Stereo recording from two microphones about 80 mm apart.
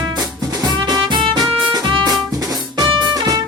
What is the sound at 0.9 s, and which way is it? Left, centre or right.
Music, right.